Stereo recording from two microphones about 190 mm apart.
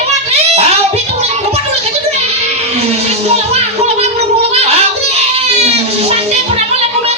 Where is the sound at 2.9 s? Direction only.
35° right (ahead or behind).